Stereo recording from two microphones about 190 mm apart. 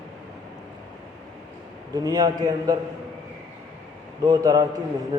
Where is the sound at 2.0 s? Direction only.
20° right (ahead or behind).